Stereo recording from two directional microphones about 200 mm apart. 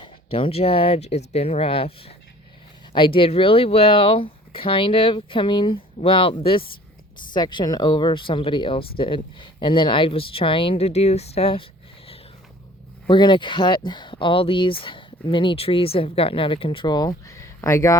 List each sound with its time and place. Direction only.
0.0 s speech: 25° left (ahead or behind)
13.1 s speech: 25° left (ahead or behind)